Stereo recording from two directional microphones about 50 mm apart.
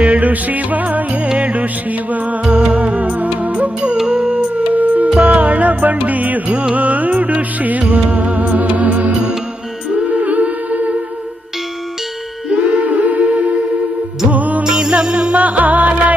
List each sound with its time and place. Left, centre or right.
0.0 s music: right
3.8 s music: centre
12.5 s music: right
14.6 s music: centre
15.4 s music: right